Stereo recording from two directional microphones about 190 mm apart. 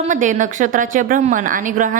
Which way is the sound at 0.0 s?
40° right (ahead or behind).